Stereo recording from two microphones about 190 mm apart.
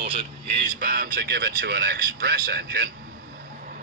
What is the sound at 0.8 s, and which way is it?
Speech, 50° right (ahead or behind).